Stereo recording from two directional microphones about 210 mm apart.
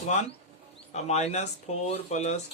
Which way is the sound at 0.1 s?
35° left (ahead or behind).